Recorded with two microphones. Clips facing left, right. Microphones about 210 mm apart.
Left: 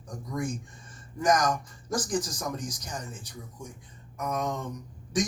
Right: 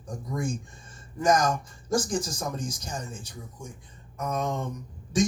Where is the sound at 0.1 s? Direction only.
25° right (ahead or behind).